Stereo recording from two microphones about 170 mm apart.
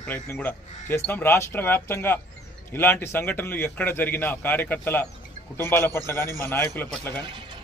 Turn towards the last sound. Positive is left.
turn(degrees=-25)  # may be behind; listen again after turning